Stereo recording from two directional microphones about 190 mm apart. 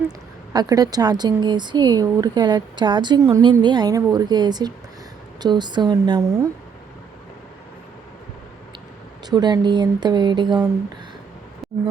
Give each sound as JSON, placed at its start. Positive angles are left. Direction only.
{"t": 0.5, "sound": "speech", "side_deg": -20}
{"t": 9.3, "sound": "speech", "side_deg": -25}
{"t": 11.6, "sound": "a sound", "side_deg": 0}